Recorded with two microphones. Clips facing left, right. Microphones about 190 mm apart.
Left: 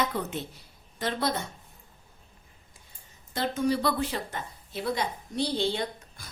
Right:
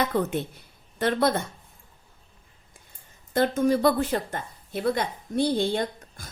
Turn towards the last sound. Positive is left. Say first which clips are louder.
# right 3 dB
turn(degrees=-50)  # may be behind; listen again after turning